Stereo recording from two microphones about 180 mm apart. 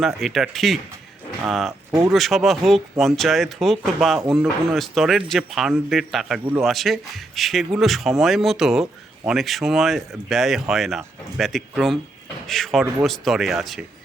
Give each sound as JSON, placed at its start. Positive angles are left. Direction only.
{"t": 0.0, "sound": "a man's voice", "side_deg": 0}
{"t": 1.9, "sound": "speech", "side_deg": -15}
{"t": 2.1, "sound": "a man's voice", "side_deg": 0}